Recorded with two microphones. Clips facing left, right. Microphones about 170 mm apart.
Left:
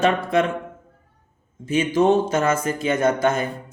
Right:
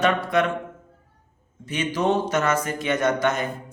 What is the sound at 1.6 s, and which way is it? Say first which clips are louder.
A man's voice: left 5 dB; 25° left (ahead or behind).